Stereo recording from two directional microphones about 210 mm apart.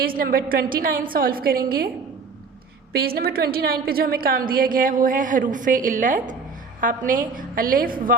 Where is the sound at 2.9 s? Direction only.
45° right (ahead or behind).